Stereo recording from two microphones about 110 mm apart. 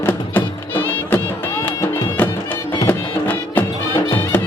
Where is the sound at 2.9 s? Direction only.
15° left (ahead or behind).